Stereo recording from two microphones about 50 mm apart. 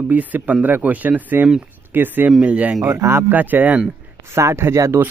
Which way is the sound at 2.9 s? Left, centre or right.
Right.